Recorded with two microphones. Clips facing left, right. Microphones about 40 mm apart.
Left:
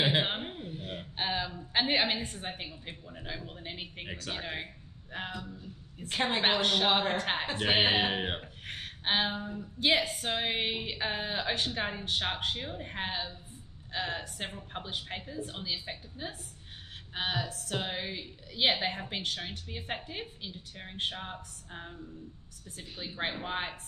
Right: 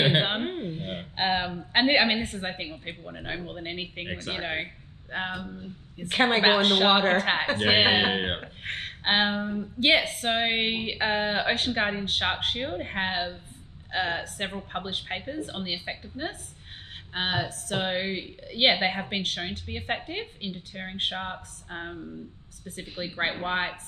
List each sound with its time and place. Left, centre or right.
0.0 s a woman's voice: right
8.6 s a woman's voice: right